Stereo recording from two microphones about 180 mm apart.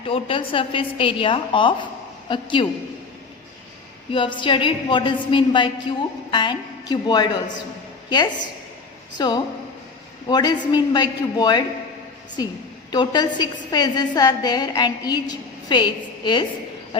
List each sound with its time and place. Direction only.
0.0 s a woman's voice: 30° left (ahead or behind)
4.1 s a woman's voice: 25° left (ahead or behind)
9.1 s a woman's voice: 25° left (ahead or behind)
16.9 s a sound: 30° left (ahead or behind)